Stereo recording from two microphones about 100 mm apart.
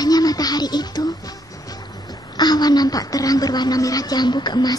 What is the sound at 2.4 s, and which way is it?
A woman's voice, 45° left (ahead or behind).